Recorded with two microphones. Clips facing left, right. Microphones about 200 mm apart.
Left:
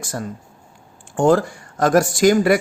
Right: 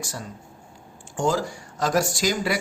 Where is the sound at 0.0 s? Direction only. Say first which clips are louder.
Left 7 dB; 55° left (ahead or behind).